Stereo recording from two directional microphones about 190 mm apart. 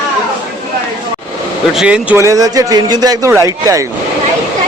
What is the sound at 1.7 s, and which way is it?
Speech, 5° right (ahead or behind).